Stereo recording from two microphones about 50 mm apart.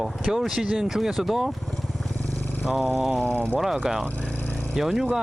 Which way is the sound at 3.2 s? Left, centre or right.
Left.